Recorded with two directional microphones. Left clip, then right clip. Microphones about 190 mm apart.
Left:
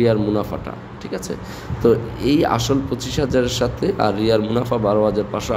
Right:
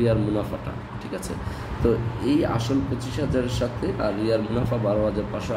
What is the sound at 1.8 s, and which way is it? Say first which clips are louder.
A man's voice: left 7 dB; 50° left (ahead or behind).